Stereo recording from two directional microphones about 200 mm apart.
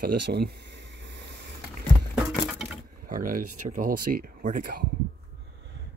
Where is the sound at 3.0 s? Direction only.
45° right (ahead or behind).